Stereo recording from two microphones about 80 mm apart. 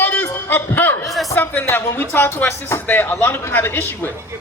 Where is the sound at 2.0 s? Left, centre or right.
Left.